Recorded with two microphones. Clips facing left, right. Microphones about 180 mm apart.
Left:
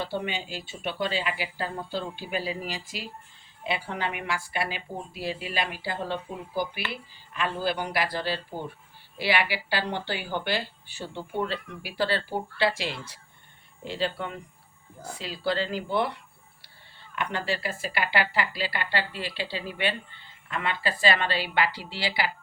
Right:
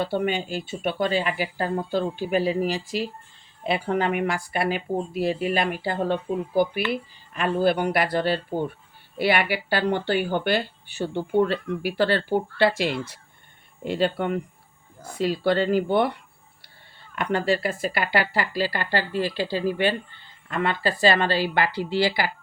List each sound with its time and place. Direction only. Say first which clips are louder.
0.0 s speech: right 7 dB; 55° right (ahead or behind)
17.2 s speech: right 7 dB; 45° right (ahead or behind)